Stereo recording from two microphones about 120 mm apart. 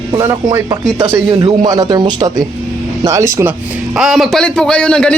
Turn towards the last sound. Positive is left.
turn(degrees=5)  # may be behind; listen again after turning